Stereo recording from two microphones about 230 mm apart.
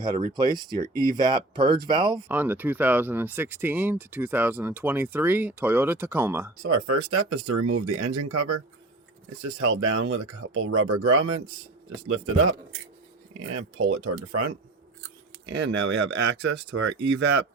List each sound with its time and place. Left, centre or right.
0.3 s speech: centre
2.2 s speech: centre
6.6 s speech: right
13.4 s speech: right
15.4 s speech: right